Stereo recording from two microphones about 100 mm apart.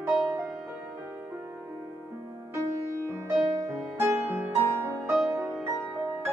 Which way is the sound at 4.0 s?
25° right (ahead or behind).